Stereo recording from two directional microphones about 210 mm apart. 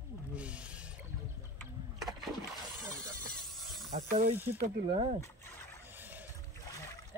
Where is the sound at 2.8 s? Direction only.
Centre (ahead or behind).